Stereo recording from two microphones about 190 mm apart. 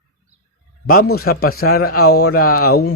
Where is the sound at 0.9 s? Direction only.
50° left (ahead or behind).